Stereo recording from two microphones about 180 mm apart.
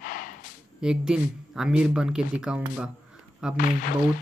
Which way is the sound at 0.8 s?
5° right (ahead or behind).